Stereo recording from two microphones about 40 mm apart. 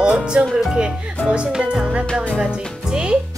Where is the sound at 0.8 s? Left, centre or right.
Right.